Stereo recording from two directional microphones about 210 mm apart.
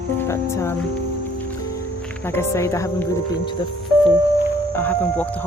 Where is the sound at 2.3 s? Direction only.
10° left (ahead or behind).